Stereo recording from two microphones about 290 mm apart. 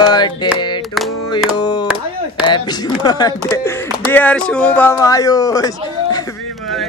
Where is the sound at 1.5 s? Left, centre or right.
Centre.